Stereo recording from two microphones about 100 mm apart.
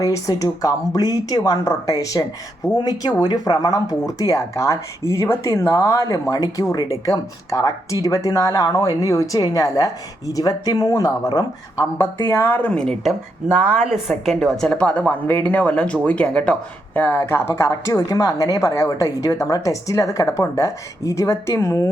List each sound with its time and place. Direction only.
0.0 s speech: 35° left (ahead or behind)
11.9 s a woman's voice: 25° left (ahead or behind)
12.8 s a woman's voice: 5° left (ahead or behind); by 21.8 s 30° left (ahead or behind)